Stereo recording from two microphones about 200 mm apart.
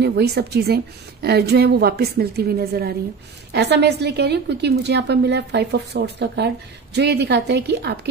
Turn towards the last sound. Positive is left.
turn(degrees=-55)  # may be behind; listen again after turning